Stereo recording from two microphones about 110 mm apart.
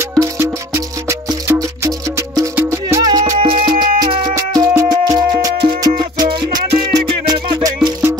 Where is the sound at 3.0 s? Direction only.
35° right (ahead or behind).